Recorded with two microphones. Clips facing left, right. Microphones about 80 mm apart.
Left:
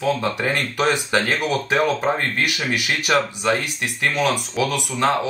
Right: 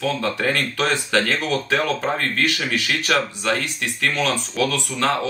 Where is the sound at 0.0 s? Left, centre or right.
Centre.